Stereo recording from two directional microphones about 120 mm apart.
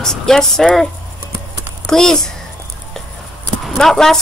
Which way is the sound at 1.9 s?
5° left (ahead or behind).